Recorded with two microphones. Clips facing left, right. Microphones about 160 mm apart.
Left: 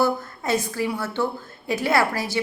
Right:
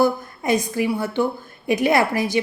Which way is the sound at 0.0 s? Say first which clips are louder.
Right 3 dB; 15° right (ahead or behind).